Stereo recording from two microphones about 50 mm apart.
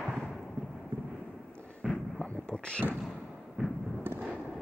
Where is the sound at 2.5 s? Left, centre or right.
Centre.